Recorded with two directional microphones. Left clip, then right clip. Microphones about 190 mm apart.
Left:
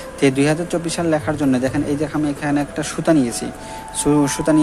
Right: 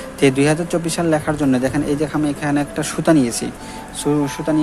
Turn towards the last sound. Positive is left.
turn(degrees=15)  # may be behind; listen again after turning